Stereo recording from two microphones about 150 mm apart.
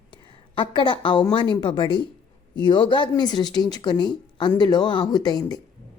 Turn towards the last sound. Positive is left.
turn(degrees=25)  # may be behind; listen again after turning